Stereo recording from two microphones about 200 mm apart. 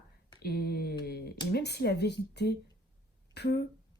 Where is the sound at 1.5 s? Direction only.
55° left (ahead or behind).